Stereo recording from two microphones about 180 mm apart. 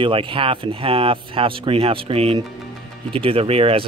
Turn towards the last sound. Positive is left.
turn(degrees=-35)  # may be behind; listen again after turning